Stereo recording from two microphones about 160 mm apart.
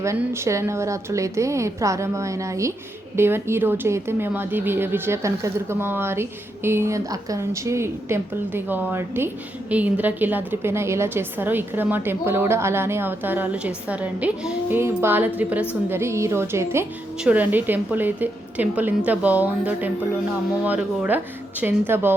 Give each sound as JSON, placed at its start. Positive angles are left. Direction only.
{"t": 0.2, "sound": "a woman's voice", "side_deg": -15}